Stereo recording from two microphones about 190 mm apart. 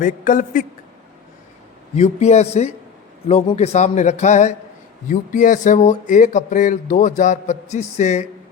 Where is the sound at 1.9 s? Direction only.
35° left (ahead or behind).